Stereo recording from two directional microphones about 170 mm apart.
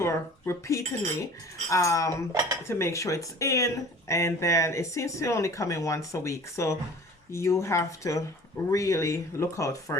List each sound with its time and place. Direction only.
0.0 s speech: 15° left (ahead or behind)